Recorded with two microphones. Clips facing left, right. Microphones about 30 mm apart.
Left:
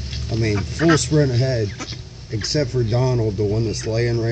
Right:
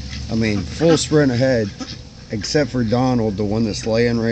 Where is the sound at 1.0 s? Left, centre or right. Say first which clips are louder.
Right 3 dB; right.